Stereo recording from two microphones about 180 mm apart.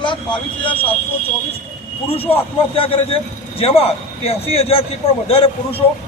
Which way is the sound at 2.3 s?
30° left (ahead or behind).